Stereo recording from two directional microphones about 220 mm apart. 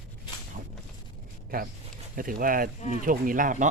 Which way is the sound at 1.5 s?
40° right (ahead or behind).